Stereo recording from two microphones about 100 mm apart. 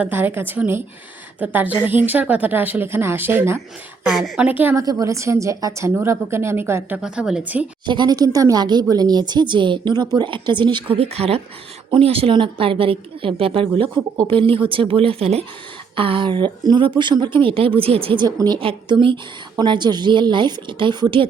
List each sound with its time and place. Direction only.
0.0 s a woman's voice: 20° right (ahead or behind)
4.1 s a woman's voice: centre (ahead or behind)
4.4 s a woman's voice: 15° right (ahead or behind)
4.8 s speech: 35° right (ahead or behind)
7.0 s a woman's voice: 10° right (ahead or behind)
7.9 s a woman's voice: 45° right (ahead or behind)
10.9 s speech: 80° right
11.9 s speech: 65° right (ahead or behind); by 15.4 s 85° right
16.0 s a woman's voice: 60° right (ahead or behind)
18.6 s a woman's voice: 60° right (ahead or behind)